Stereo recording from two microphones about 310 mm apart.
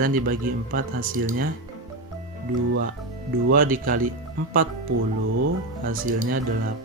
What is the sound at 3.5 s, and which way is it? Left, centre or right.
Speech, right.